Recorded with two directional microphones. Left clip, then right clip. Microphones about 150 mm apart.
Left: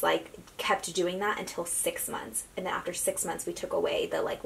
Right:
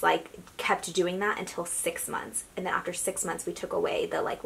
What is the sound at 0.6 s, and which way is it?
Speech, 35° right (ahead or behind).